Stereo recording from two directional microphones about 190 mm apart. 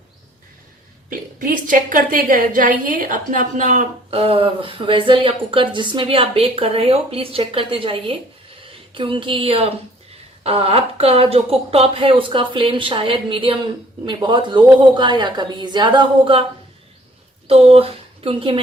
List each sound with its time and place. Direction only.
1.1 s a woman's voice: 45° right (ahead or behind); by 16.4 s 25° right (ahead or behind)
17.5 s speech: 30° right (ahead or behind)